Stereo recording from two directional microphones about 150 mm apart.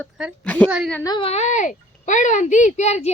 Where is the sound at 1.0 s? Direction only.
30° left (ahead or behind).